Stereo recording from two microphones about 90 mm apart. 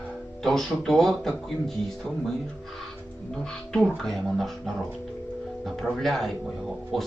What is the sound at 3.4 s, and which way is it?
Speech, 5° left (ahead or behind).